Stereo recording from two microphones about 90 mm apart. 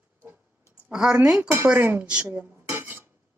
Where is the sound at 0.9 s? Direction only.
5° right (ahead or behind).